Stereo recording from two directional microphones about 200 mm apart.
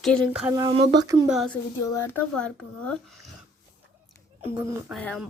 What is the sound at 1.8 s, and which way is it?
Speech, 15° left (ahead or behind).